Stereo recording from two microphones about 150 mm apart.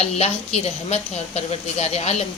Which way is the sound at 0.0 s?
45° left (ahead or behind).